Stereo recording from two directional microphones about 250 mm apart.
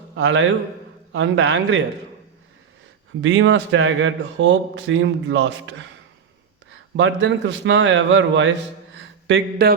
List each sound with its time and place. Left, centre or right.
0.2 s speech: right
3.2 s speech: right
6.9 s speech: right